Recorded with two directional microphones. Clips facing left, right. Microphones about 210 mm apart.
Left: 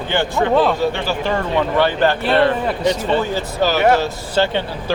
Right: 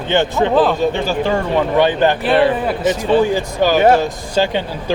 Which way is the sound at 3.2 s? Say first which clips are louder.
Right 4 dB; 15° right (ahead or behind).